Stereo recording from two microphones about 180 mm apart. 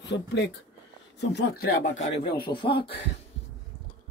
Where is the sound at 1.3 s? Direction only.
65° left (ahead or behind).